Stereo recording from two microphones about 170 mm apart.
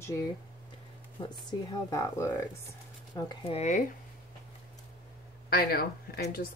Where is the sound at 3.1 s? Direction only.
35° left (ahead or behind).